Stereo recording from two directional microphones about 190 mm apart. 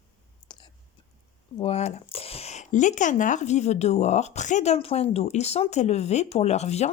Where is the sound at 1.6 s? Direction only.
35° left (ahead or behind).